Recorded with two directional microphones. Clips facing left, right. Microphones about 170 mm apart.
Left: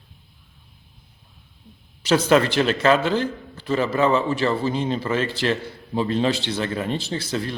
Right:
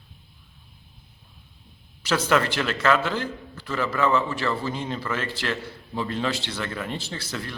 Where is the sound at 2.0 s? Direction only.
20° left (ahead or behind).